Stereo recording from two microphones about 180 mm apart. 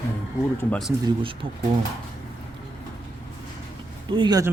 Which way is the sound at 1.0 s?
30° right (ahead or behind).